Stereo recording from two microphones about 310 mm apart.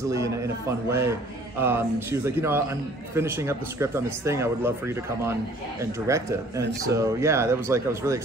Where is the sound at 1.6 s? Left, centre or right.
Centre.